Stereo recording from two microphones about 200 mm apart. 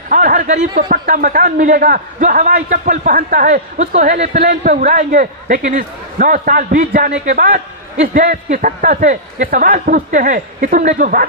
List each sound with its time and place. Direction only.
0.1 s a man's voice: 45° right (ahead or behind)